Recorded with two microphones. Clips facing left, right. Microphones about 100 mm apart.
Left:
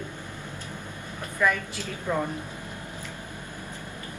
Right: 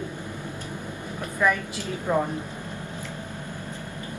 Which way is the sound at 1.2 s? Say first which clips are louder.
Right 2 dB; 15° right (ahead or behind).